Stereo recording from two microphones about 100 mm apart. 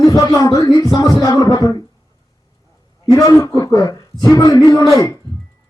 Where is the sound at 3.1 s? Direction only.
30° left (ahead or behind).